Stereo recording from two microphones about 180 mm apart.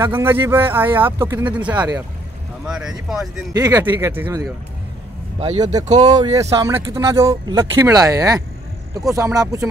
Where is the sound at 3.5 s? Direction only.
20° right (ahead or behind).